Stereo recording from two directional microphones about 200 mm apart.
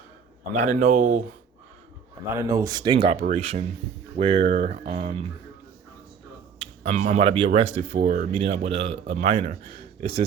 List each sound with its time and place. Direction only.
0.5 s speech: 40° right (ahead or behind)
2.3 s speech: 15° right (ahead or behind); by 5.2 s 30° right (ahead or behind)
6.6 s speech: 35° right (ahead or behind)
8.3 s speech: 30° right (ahead or behind)